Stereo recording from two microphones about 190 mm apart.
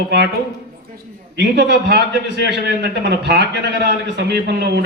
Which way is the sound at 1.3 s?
65° right (ahead or behind).